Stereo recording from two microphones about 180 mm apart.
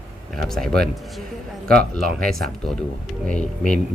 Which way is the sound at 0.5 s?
Centre (ahead or behind).